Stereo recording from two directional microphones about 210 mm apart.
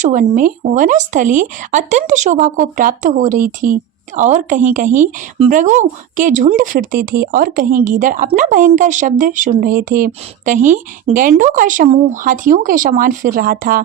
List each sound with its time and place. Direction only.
0.0 s speech: 35° right (ahead or behind)